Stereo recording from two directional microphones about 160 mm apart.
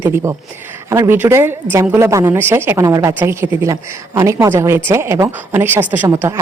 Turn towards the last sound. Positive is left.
turn(degrees=-15)  # may be behind; listen again after turning